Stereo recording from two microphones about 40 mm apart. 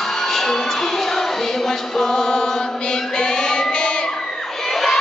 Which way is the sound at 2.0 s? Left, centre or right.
Centre.